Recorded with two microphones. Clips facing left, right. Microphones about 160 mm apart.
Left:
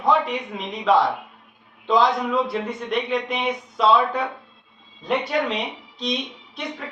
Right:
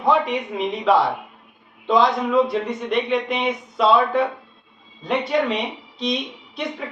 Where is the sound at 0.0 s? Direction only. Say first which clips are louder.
Right 1 dB; centre (ahead or behind).